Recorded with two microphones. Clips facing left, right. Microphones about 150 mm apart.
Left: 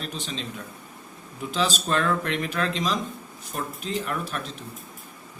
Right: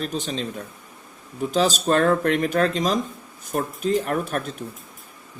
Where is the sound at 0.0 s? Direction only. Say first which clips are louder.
Right 6 dB; 45° right (ahead or behind).